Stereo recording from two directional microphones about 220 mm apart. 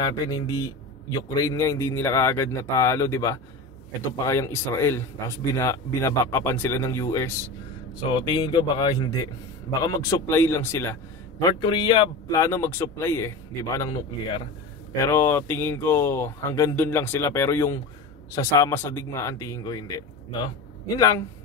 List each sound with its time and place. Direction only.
0.0 s a man's voice: 15° left (ahead or behind)